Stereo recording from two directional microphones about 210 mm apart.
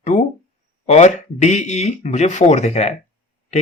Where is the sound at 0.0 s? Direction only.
35° left (ahead or behind).